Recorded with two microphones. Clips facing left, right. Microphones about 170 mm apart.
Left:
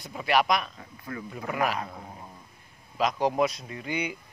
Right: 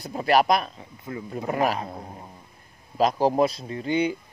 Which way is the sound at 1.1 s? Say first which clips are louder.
Right 3 dB; 25° right (ahead or behind).